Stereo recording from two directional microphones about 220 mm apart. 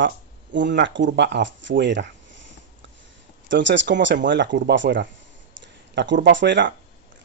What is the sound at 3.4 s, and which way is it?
Speech, 55° right (ahead or behind).